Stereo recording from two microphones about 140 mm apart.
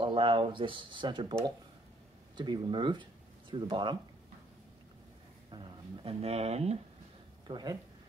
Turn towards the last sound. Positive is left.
turn(degrees=-30)  # may be behind; listen again after turning